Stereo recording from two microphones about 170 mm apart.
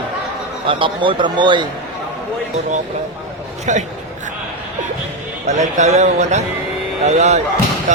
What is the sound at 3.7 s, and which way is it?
Speech, 45° right (ahead or behind).